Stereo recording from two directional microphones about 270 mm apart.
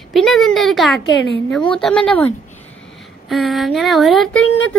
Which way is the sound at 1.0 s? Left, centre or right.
Left.